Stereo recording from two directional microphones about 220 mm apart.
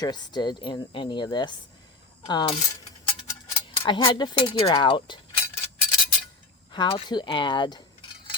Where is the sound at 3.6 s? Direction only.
20° left (ahead or behind).